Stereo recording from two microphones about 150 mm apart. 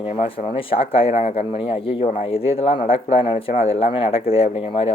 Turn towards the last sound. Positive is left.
turn(degrees=40)  # may be behind; listen again after turning